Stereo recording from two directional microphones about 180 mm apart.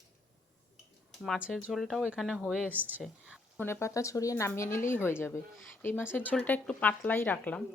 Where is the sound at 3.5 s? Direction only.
15° left (ahead or behind).